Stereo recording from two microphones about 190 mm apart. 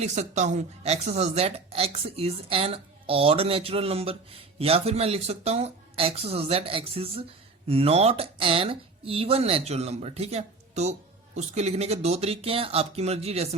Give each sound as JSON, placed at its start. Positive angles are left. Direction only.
{"t": 0.0, "sound": "speech", "side_deg": -40}